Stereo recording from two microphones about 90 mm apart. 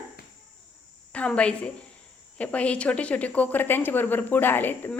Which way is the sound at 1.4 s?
15° left (ahead or behind).